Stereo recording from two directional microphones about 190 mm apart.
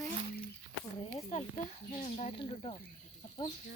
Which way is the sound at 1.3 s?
35° left (ahead or behind).